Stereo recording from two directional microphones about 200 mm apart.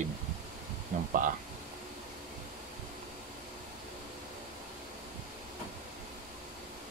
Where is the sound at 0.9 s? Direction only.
40° right (ahead or behind).